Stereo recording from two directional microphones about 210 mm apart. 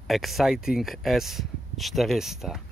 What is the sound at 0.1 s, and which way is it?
Speech, centre (ahead or behind).